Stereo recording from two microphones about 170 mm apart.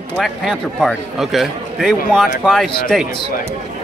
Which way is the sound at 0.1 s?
Centre (ahead or behind).